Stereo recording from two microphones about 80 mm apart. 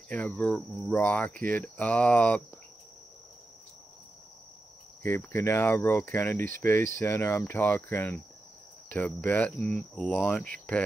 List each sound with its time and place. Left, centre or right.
0.1 s speech: centre
5.0 s speech: left
7.5 s speech: left